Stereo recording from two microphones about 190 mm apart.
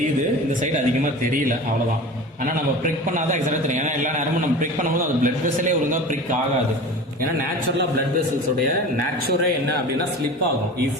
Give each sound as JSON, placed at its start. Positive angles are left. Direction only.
{"t": 2.4, "sound": "a man's voice", "side_deg": -45}
{"t": 5.2, "sound": "a man's voice", "side_deg": -40}